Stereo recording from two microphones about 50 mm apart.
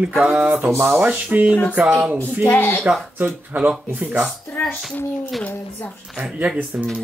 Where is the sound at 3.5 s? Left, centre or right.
Right.